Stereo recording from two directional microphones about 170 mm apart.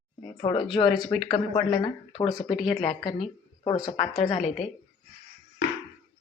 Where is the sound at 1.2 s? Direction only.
30° left (ahead or behind).